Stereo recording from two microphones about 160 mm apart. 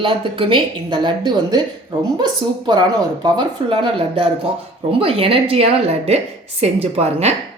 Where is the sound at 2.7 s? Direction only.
25° right (ahead or behind).